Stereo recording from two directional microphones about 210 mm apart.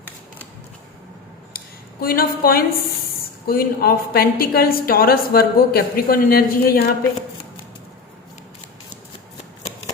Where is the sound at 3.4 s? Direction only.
45° left (ahead or behind).